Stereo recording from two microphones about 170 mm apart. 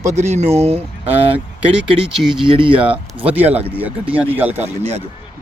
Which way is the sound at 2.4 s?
30° right (ahead or behind).